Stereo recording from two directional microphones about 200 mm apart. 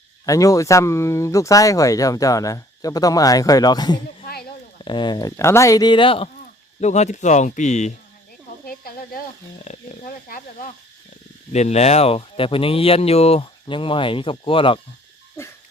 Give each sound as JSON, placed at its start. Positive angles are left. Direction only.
{"t": 0.3, "sound": "speech", "side_deg": 15}
{"t": 4.3, "sound": "a sound", "side_deg": 50}
{"t": 4.8, "sound": "speech", "side_deg": 25}
{"t": 8.6, "sound": "snake", "side_deg": 50}
{"t": 9.6, "sound": "speech", "side_deg": 35}
{"t": 11.5, "sound": "speech", "side_deg": 35}
{"t": 15.4, "sound": "dog", "side_deg": 10}